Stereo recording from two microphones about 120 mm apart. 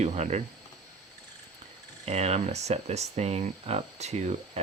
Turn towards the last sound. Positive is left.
turn(degrees=-65)  # may be behind; listen again after turning